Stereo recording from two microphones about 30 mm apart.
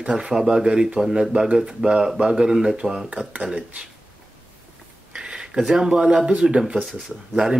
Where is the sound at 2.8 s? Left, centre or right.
Right.